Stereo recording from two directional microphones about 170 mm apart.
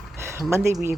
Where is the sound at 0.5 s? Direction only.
15° right (ahead or behind).